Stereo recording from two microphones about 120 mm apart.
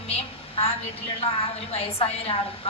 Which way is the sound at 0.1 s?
55° left (ahead or behind).